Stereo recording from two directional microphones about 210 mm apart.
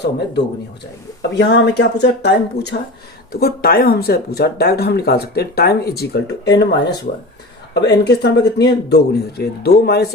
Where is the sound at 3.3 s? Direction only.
45° left (ahead or behind).